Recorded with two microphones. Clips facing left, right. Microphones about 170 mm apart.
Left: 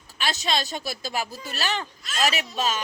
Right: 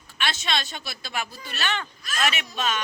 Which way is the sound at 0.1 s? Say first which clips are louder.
Left 1 dB; 40° left (ahead or behind).